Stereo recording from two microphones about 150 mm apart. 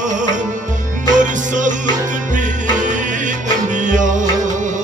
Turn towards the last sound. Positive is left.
turn(degrees=-55)  # may be behind; listen again after turning